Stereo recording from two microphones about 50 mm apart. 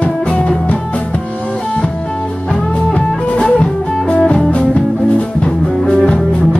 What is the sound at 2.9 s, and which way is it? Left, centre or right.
Music, centre.